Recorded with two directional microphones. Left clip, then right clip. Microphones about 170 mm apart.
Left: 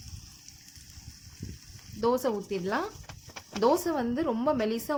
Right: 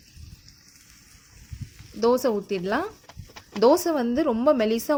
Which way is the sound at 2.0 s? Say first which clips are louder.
Right 6 dB; 30° right (ahead or behind).